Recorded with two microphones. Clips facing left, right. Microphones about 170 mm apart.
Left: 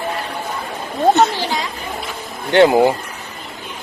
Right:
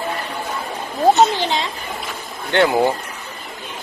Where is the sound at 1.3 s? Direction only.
20° right (ahead or behind).